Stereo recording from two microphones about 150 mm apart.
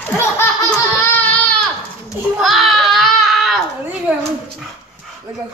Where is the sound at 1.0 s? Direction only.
10° left (ahead or behind).